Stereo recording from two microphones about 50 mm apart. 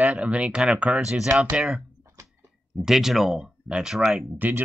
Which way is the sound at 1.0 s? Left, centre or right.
Centre.